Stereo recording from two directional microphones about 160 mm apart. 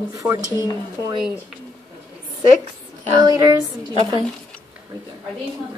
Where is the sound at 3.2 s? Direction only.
25° right (ahead or behind).